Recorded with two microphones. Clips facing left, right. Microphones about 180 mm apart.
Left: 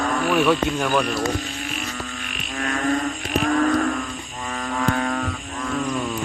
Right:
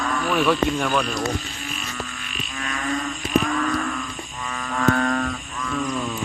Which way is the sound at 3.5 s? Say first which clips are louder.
Left 5 dB; 40° left (ahead or behind).